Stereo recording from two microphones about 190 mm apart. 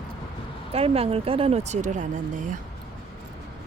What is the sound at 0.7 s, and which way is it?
Speech, 30° right (ahead or behind).